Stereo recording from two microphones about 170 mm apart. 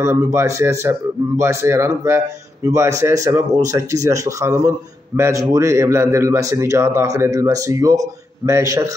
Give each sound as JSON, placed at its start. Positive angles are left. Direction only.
{"t": 0.0, "sound": "a man's voice", "side_deg": -15}